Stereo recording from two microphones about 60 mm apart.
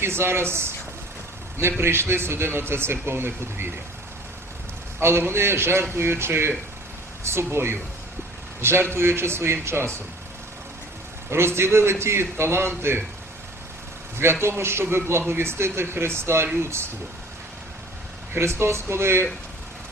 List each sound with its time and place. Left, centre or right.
0.0 s a man's voice: right
1.8 s a man's voice: right
4.9 s a man's voice: right
11.3 s a man's voice: right
14.4 s a man's voice: right
18.3 s a man's voice: right